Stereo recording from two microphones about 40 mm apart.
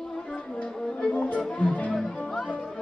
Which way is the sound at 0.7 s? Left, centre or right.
Centre.